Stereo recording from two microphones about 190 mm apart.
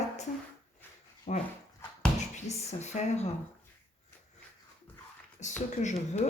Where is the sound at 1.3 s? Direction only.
35° left (ahead or behind).